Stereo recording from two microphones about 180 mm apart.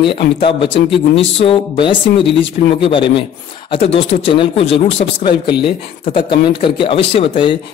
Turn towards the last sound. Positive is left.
turn(degrees=30)  # may be behind; listen again after turning